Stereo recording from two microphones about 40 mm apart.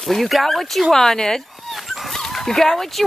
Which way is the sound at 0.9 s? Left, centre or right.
Centre.